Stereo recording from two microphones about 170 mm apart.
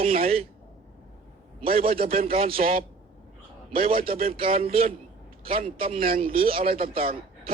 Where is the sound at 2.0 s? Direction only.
60° right (ahead or behind).